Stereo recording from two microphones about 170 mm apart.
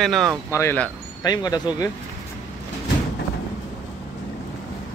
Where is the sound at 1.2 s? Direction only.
20° left (ahead or behind).